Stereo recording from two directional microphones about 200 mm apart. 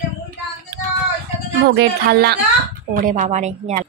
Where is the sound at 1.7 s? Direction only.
50° right (ahead or behind).